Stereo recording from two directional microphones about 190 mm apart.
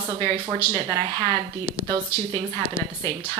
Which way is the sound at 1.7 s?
30° right (ahead or behind).